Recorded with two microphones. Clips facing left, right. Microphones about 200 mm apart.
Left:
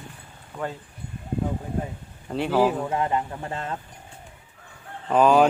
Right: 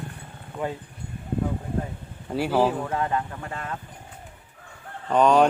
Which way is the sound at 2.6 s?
15° left (ahead or behind).